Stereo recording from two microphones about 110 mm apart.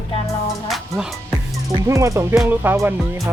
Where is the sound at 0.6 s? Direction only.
Centre (ahead or behind).